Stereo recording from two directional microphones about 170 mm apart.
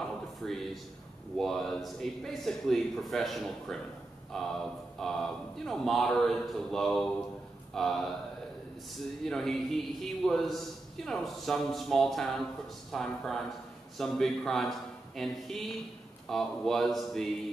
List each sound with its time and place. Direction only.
0.4 s a man's voice: 5° left (ahead or behind)
9.2 s a man's voice: centre (ahead or behind)